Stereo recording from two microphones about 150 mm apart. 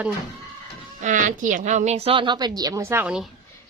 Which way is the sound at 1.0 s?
55° right (ahead or behind).